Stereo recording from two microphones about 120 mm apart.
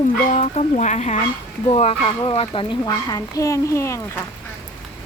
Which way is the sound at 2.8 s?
30° left (ahead or behind).